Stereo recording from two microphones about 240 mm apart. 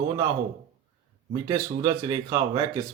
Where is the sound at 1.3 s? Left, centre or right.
Centre.